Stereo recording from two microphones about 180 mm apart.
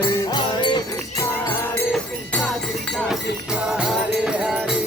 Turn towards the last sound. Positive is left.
turn(degrees=-5)  # may be behind; listen again after turning